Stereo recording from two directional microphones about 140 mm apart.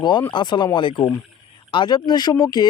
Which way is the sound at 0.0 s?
35° left (ahead or behind).